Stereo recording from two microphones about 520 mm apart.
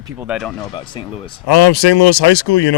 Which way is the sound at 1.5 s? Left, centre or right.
Left.